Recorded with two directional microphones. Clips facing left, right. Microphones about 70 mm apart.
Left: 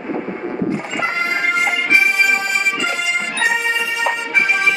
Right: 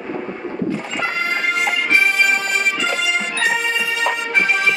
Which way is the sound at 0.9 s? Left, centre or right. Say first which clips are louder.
Left 1 dB; left.